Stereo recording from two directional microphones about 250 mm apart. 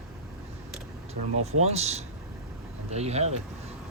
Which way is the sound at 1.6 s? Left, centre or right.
Right.